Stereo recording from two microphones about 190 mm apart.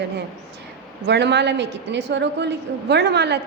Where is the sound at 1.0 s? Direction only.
65° right (ahead or behind).